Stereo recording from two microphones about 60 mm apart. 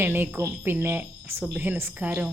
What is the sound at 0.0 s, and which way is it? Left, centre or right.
A woman's voice, right.